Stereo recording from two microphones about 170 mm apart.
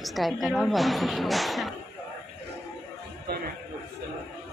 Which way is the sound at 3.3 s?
65° right (ahead or behind).